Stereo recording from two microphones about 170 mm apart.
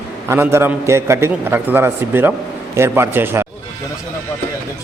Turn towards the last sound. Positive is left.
turn(degrees=-15)  # may be behind; listen again after turning